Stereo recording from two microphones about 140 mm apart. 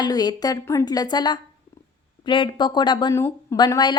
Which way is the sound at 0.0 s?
30° left (ahead or behind).